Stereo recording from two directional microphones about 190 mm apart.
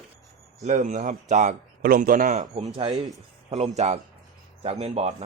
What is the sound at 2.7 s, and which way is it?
Speech, 25° right (ahead or behind).